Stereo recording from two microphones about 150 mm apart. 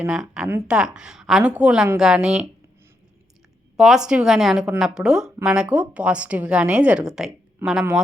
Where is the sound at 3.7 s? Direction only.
Centre (ahead or behind).